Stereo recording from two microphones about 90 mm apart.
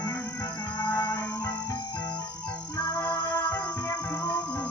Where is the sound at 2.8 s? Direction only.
30° left (ahead or behind).